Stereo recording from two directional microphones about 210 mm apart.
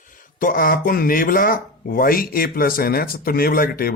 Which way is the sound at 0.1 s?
40° left (ahead or behind).